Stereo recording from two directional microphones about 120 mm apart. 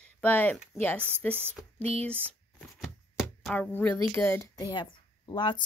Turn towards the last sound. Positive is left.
turn(degrees=40)  # may be behind; listen again after turning